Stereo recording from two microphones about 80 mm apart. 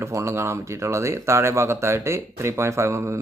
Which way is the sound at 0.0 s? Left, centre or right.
Right.